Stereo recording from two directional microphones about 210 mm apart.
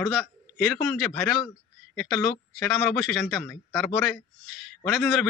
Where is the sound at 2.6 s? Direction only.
Centre (ahead or behind).